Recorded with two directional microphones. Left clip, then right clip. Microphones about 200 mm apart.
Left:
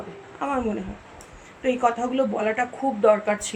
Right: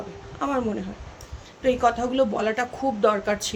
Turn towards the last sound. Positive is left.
turn(degrees=-15)  # may be behind; listen again after turning